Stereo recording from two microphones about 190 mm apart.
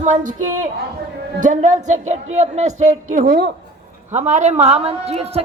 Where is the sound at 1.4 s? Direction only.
40° right (ahead or behind).